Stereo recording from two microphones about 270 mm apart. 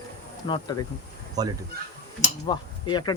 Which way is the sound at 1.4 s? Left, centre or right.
Centre.